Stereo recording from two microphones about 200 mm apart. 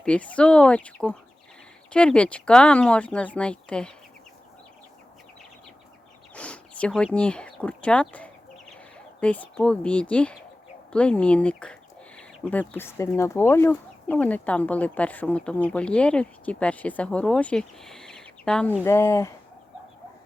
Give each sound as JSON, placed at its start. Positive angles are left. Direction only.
{"t": 0.0, "sound": "speech", "side_deg": 5}
{"t": 6.3, "sound": "speech", "side_deg": 5}